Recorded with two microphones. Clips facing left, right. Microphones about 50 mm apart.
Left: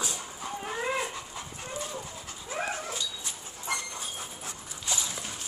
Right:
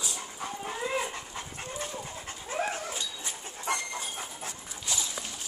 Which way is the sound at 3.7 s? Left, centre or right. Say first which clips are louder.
Right 2 dB; right.